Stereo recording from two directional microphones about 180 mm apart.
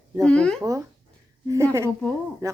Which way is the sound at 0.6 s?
20° right (ahead or behind).